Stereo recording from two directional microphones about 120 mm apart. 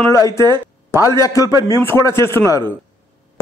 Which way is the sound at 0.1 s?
25° left (ahead or behind).